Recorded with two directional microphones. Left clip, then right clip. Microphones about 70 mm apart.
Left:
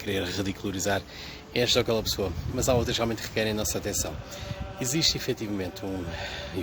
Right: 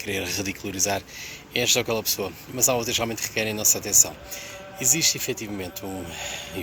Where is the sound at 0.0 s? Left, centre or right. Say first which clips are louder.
Right 2 dB; left.